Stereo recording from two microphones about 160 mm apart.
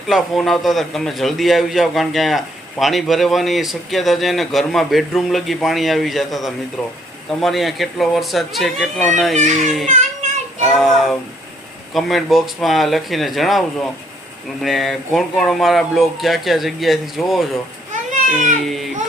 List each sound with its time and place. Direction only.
0.1 s a man's voice: centre (ahead or behind)
9.3 s a child's voice: 50° right (ahead or behind)
10.8 s a man's voice: centre (ahead or behind)
18.1 s baby cry: 55° right (ahead or behind)
18.6 s baby cry: centre (ahead or behind)